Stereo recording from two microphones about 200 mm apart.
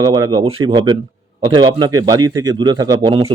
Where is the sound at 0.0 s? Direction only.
20° right (ahead or behind).